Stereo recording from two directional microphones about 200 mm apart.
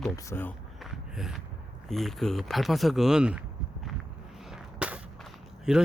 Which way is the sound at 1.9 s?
Centre (ahead or behind).